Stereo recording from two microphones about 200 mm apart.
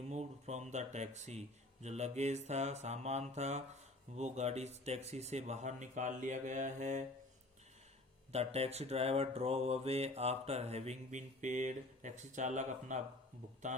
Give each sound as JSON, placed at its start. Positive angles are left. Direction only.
{"t": 0.1, "sound": "speech", "side_deg": -35}
{"t": 8.3, "sound": "speech", "side_deg": -30}